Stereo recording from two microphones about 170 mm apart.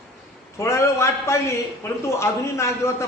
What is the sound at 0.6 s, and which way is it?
A man's voice, 15° left (ahead or behind).